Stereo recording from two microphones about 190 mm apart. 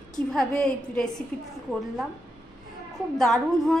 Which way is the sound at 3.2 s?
Centre (ahead or behind).